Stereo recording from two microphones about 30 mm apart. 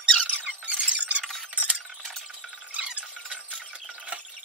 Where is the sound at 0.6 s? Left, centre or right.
Right.